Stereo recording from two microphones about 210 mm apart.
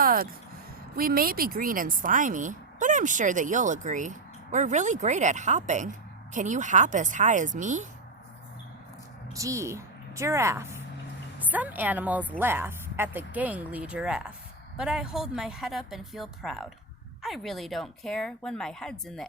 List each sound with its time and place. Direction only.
0.0 s a sound: 45° right (ahead or behind)
0.9 s speech: 45° right (ahead or behind)
9.3 s a woman's voice: 15° right (ahead or behind); by 19.3 s 5° left (ahead or behind)